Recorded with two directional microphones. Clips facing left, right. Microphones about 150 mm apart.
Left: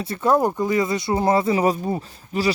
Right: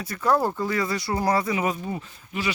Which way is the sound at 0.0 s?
25° left (ahead or behind).